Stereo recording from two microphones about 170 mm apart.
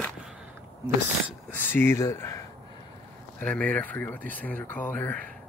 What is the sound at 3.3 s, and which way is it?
Speech, 10° left (ahead or behind).